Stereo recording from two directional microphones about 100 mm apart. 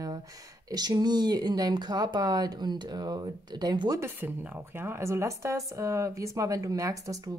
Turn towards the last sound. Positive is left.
turn(degrees=-35)  # may be behind; listen again after turning